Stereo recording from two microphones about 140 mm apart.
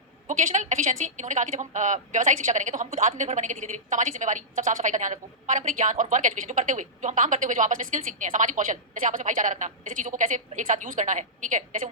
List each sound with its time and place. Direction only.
0.3 s a woman's voice: 60° right (ahead or behind)